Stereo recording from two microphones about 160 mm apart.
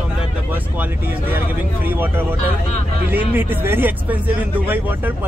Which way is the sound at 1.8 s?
10° right (ahead or behind).